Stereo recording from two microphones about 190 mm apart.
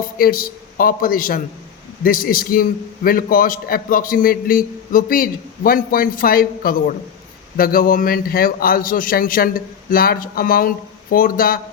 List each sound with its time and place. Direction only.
0.2 s a man's voice: 50° left (ahead or behind)